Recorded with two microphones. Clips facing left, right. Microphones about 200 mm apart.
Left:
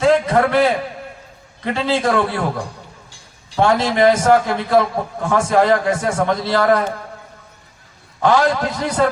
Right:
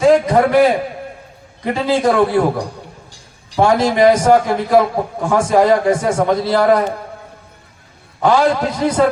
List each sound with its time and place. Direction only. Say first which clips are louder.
0.0 s a sound: right 3 dB; 15° right (ahead or behind)
1.6 s a man's voice: right 3 dB; 15° right (ahead or behind)
8.2 s a man's voice: right 2 dB; 15° right (ahead or behind)